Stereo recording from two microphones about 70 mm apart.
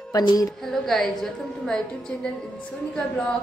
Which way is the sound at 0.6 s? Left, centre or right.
Centre.